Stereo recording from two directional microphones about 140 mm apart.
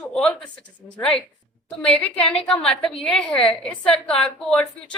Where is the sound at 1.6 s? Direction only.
5° left (ahead or behind).